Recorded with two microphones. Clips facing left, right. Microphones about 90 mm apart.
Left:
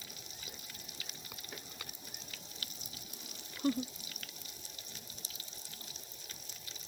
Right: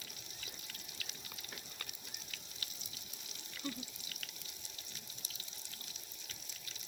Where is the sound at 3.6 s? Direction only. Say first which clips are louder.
Left 11 dB; 45° left (ahead or behind).